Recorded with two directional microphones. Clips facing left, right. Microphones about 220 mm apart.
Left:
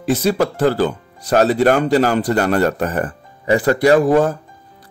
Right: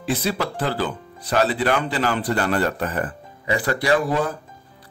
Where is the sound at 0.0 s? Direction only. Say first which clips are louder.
Left 7 dB; 45° left (ahead or behind).